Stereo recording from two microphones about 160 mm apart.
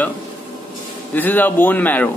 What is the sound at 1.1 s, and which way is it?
Speech, 10° left (ahead or behind).